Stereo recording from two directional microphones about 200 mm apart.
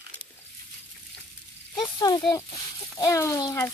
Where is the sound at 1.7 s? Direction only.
20° left (ahead or behind).